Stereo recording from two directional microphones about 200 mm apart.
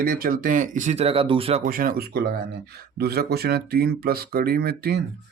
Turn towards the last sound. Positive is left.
turn(degrees=-50)  # may be behind; listen again after turning